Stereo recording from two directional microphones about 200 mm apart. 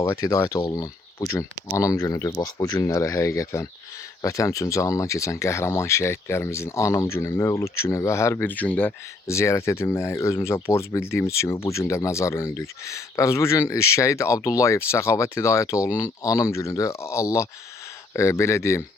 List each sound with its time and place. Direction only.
0.0 s speech: 15° left (ahead or behind)